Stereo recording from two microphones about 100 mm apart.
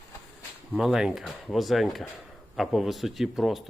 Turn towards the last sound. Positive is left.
turn(degrees=-5)  # may be behind; listen again after turning